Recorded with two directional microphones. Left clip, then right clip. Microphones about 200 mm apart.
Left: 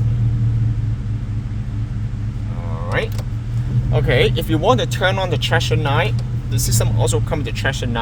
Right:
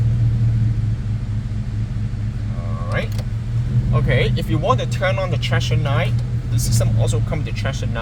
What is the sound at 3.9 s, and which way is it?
Speech, 65° left (ahead or behind).